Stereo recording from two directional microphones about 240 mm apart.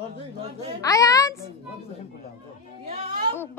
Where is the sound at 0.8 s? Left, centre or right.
Centre.